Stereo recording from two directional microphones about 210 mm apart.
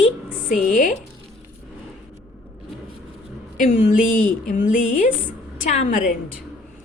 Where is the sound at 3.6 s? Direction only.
35° left (ahead or behind).